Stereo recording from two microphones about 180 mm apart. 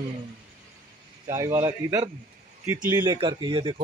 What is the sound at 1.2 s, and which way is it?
A man's voice, 20° right (ahead or behind).